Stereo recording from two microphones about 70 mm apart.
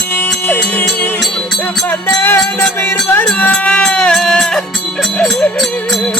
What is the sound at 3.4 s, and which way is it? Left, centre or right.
Music, left.